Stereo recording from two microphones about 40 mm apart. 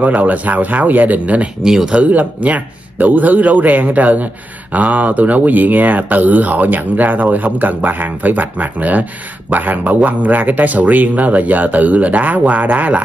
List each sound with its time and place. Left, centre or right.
0.2 s a man's voice: right
1.6 s speech: centre
2.0 s a man's voice: right